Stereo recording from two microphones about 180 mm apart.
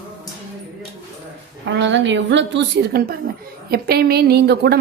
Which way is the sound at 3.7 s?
60° right (ahead or behind).